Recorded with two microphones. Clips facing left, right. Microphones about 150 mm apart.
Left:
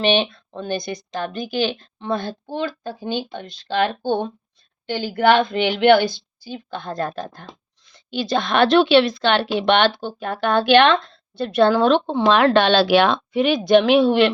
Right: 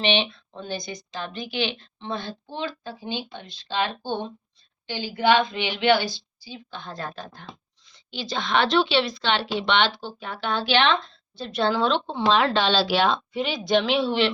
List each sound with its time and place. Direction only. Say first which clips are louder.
0.0 s a woman's voice: left 5 dB; 45° left (ahead or behind)